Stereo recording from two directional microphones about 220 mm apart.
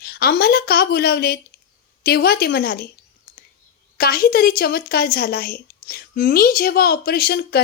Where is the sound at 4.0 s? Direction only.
40° left (ahead or behind).